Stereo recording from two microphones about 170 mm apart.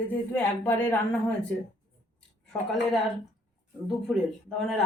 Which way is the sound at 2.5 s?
Centre (ahead or behind).